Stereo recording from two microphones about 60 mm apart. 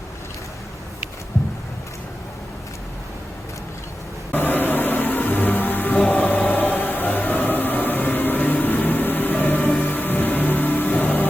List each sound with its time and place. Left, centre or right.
4.3 s music: left